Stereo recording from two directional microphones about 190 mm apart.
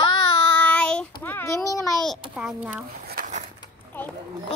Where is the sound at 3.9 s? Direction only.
10° left (ahead or behind).